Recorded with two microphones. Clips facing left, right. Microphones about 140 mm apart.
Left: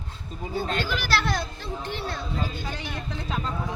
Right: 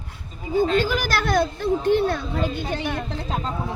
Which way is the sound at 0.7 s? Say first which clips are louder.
Right 5 dB; 45° right (ahead or behind).